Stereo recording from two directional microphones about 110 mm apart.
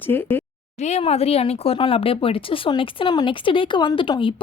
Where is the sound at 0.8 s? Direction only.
70° left (ahead or behind); by 4.4 s 50° left (ahead or behind).